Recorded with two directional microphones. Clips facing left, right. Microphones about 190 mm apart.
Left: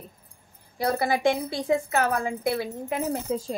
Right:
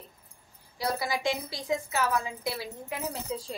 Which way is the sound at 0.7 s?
55° left (ahead or behind).